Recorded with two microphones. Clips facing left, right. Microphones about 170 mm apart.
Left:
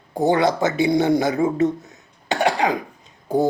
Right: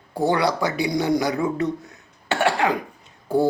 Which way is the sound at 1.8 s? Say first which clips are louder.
Left 2 dB; 20° left (ahead or behind).